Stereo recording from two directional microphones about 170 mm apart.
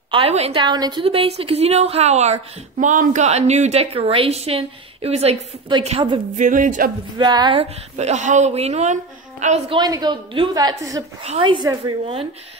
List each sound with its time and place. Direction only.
0.1 s a woman's voice: 35° right (ahead or behind)
6.3 s a sound: 50° right (ahead or behind)
7.2 s a woman's voice: 25° right (ahead or behind)
8.0 s a woman's voice: 45° right (ahead or behind)
9.7 s a woman's voice: 25° right (ahead or behind)